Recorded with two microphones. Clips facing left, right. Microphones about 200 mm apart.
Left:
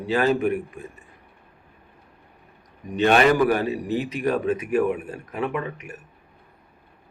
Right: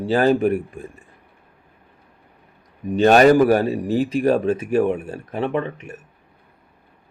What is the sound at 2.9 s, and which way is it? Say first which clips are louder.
Speech: right 5 dB; 40° right (ahead or behind).